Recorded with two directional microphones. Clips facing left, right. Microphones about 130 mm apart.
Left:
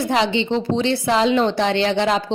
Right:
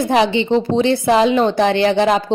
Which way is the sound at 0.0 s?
15° right (ahead or behind).